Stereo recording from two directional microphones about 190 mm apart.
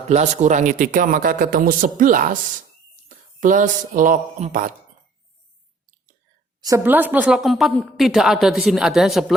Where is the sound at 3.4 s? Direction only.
40° right (ahead or behind).